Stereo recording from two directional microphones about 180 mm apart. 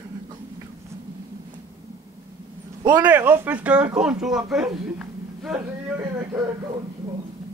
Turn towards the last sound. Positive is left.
turn(degrees=-10)  # may be behind; listen again after turning